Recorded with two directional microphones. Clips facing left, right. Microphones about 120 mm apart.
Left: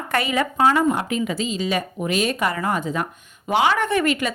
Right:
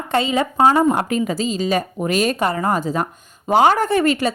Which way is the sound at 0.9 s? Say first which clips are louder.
Right 3 dB; 45° right (ahead or behind).